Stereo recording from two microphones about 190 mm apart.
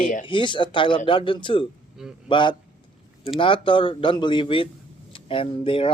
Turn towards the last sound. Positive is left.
turn(degrees=30)  # may be behind; listen again after turning